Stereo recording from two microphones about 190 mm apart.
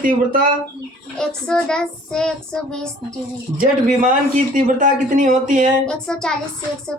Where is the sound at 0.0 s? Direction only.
45° right (ahead or behind).